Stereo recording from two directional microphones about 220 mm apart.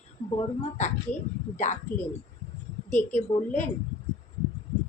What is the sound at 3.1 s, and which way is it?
Speech, 35° left (ahead or behind).